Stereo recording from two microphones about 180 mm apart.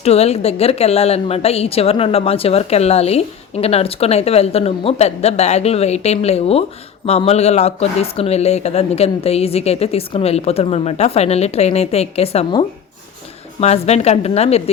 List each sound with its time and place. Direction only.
0.0 s speech: 35° left (ahead or behind)